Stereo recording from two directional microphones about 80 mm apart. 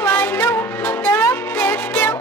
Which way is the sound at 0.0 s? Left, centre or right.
Left.